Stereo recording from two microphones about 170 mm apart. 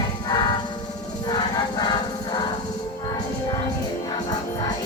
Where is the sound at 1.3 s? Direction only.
25° left (ahead or behind).